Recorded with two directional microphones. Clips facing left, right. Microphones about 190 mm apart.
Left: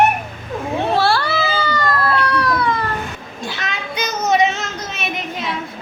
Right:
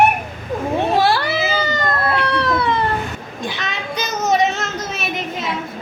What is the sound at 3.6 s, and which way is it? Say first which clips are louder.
Child singing: left 3 dB; centre (ahead or behind).